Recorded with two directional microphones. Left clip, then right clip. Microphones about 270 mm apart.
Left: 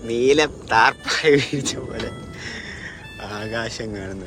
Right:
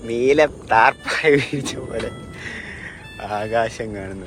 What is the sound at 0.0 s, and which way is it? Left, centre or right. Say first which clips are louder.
Speech: right 1 dB; centre.